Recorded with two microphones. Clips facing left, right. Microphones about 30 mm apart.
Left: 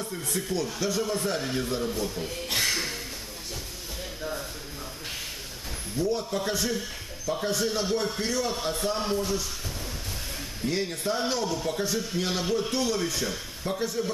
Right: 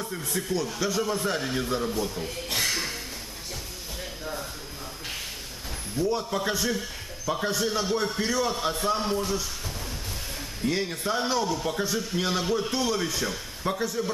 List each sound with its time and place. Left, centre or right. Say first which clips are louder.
0.2 s a man's voice: right 1 dB; centre
2.4 s a sound: left 1 dB; centre
4.2 s a sound: left 2 dB; centre
6.1 s a man's voice: right 1 dB; centre
6.5 s speech: even; centre
7.2 s a man's voice: right 1 dB; centre
7.5 s a man's voice: right 1 dB; centre
10.7 s a man's voice: right 1 dB; centre
11.2 s a man's voice: right 2 dB; centre
13.7 s a man's voice: right 2 dB; centre